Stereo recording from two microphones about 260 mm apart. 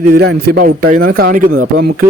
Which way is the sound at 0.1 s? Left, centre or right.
Right.